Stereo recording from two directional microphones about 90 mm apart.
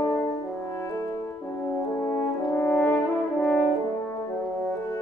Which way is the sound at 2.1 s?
20° left (ahead or behind).